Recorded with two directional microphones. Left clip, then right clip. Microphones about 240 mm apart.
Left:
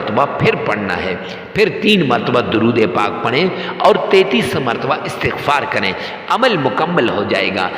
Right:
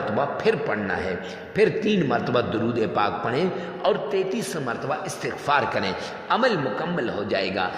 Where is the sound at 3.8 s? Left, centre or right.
Left.